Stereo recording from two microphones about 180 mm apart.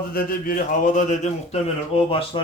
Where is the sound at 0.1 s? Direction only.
55° left (ahead or behind).